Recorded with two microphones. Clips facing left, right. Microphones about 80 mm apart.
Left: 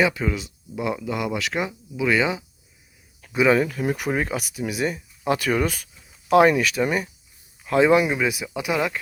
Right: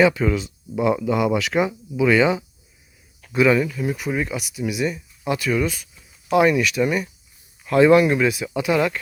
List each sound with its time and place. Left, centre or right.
0.0 s speech: centre
3.7 s speech: left
6.3 s speech: left
7.6 s speech: centre